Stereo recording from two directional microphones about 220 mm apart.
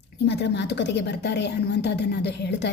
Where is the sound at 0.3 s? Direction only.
50° left (ahead or behind).